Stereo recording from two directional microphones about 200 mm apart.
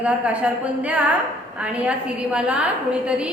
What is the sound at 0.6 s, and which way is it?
Speech, 5° right (ahead or behind).